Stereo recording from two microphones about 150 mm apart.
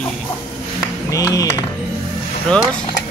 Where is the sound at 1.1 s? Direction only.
25° left (ahead or behind).